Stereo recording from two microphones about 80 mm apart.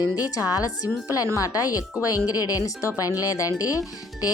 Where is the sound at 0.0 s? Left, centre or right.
Left.